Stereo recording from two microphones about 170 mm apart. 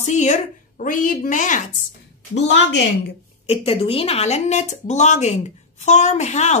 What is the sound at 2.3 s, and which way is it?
Speech, 90° left.